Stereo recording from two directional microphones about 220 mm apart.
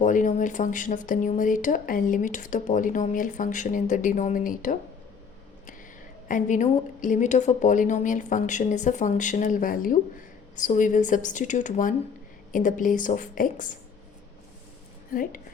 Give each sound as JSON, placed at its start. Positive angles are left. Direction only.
{"t": 0.0, "sound": "speech", "side_deg": 35}
{"t": 6.2, "sound": "speech", "side_deg": 35}
{"t": 15.1, "sound": "speech", "side_deg": 40}